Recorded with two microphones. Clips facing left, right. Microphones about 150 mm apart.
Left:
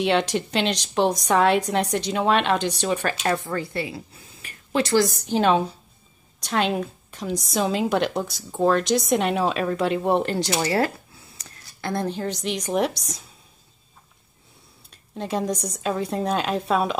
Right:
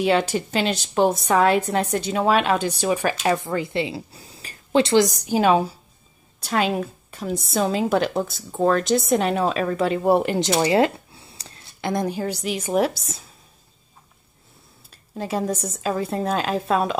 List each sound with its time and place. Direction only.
0.0 s a woman's voice: 5° right (ahead or behind); by 10.9 s 20° right (ahead or behind)
11.1 s a sound: 30° right (ahead or behind)
11.8 s a woman's voice: 15° right (ahead or behind)
14.9 s a woman's voice: 5° right (ahead or behind)